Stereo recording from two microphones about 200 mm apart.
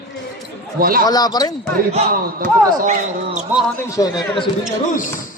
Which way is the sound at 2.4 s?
40° right (ahead or behind).